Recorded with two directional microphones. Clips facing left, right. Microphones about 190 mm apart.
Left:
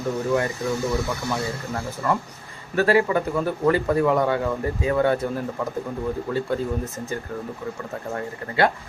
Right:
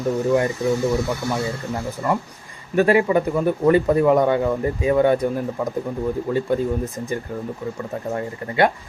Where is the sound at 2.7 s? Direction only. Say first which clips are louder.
Right 3 dB; 20° right (ahead or behind).